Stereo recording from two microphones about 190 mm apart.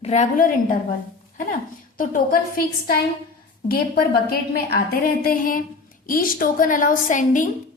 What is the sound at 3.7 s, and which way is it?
A woman's voice, 50° left (ahead or behind).